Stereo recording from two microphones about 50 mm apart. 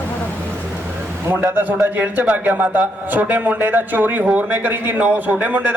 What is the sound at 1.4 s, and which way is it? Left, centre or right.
A man's voice, right.